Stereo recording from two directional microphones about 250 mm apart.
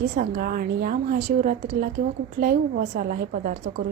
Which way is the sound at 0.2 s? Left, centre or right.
Right.